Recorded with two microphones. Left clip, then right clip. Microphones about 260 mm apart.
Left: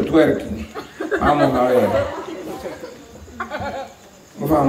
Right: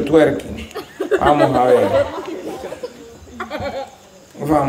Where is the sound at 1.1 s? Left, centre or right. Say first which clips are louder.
Right 4 dB; right.